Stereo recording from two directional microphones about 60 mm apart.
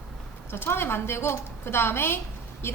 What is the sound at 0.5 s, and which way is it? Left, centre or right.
A woman's voice, left.